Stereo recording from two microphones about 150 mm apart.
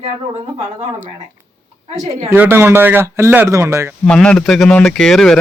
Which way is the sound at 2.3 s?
15° right (ahead or behind).